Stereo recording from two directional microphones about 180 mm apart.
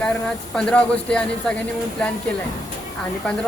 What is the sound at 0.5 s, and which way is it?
Speech, 5° left (ahead or behind).